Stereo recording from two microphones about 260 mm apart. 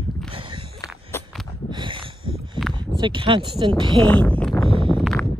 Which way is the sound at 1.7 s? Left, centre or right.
Centre.